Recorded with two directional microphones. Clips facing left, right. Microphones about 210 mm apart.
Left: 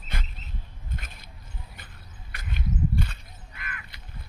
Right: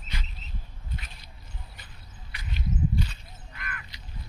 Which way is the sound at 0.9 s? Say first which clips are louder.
Left 1 dB; 50° left (ahead or behind).